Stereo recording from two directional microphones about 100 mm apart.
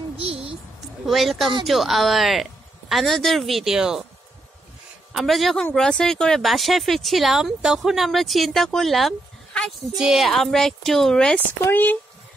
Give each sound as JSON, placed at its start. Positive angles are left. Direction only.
{"t": 0.2, "sound": "a sound", "side_deg": -70}
{"t": 1.0, "sound": "speech", "side_deg": 0}
{"t": 5.1, "sound": "speech", "side_deg": 0}
{"t": 11.6, "sound": "speech", "side_deg": 20}